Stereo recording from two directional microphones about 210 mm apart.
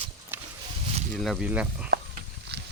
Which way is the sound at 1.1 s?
Centre (ahead or behind).